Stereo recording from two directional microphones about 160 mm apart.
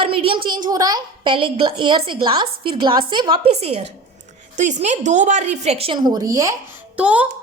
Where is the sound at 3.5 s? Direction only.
40° right (ahead or behind); by 6.5 s 20° right (ahead or behind).